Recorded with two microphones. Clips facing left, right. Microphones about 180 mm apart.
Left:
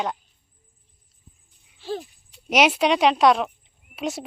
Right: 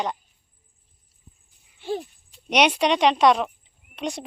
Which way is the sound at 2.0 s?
5° left (ahead or behind).